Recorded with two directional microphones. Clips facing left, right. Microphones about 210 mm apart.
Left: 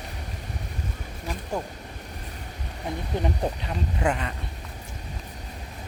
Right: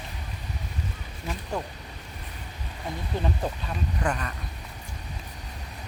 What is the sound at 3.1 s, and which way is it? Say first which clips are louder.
Speech: left 2 dB; 20° left (ahead or behind).